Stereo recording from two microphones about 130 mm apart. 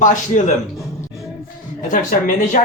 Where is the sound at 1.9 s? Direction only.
80° left.